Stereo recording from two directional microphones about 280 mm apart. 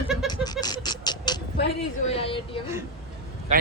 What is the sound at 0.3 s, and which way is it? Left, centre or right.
Goat, centre.